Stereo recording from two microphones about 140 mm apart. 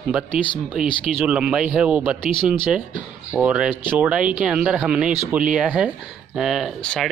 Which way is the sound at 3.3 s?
10° right (ahead or behind).